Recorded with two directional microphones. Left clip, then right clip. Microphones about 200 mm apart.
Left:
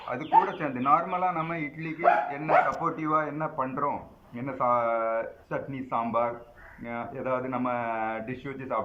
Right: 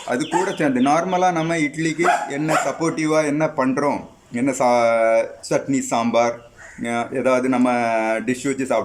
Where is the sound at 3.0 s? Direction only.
30° right (ahead or behind).